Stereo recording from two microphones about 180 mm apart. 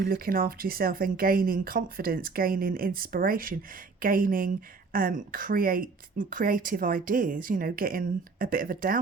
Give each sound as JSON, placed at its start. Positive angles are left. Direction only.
{"t": 0.0, "sound": "a woman's voice", "side_deg": -55}